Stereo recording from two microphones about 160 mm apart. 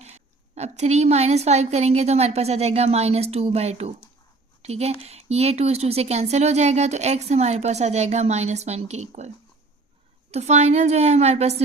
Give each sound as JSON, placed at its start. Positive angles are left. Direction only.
{"t": 0.0, "sound": "a woman's voice", "side_deg": -45}
{"t": 10.3, "sound": "speech", "side_deg": -45}